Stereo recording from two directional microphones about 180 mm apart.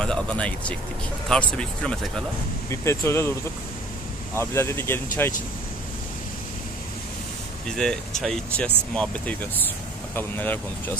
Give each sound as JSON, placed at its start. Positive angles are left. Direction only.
{"t": 0.0, "sound": "speech", "side_deg": 5}
{"t": 2.7, "sound": "speech", "side_deg": 15}
{"t": 4.4, "sound": "speech", "side_deg": 15}
{"t": 7.7, "sound": "speech", "side_deg": 5}